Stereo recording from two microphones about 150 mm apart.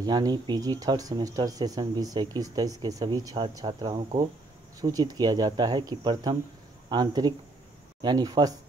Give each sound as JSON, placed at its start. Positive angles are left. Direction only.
{"t": 0.0, "sound": "speech", "side_deg": -25}